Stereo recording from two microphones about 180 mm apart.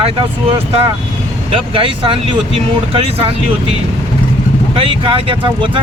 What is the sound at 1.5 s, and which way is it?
Speech, 30° right (ahead or behind).